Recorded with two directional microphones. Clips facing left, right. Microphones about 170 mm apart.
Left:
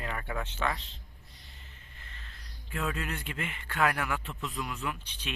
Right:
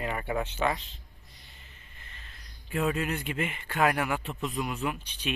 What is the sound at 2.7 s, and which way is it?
A man's voice, 20° right (ahead or behind).